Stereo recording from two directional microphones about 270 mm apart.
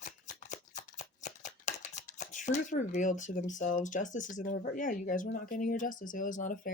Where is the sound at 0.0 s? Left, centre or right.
Left.